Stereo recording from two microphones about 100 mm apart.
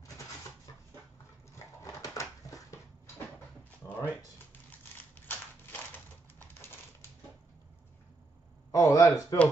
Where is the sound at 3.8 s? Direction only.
35° left (ahead or behind).